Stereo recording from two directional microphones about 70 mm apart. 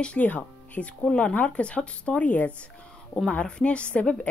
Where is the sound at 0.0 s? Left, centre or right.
Centre.